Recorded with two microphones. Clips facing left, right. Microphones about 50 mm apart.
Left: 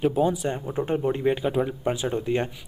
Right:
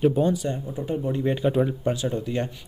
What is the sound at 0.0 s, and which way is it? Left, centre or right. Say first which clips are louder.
Speech: right 1 dB; centre.